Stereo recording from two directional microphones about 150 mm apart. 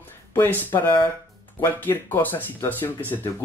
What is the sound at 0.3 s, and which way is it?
Speech, 15° left (ahead or behind).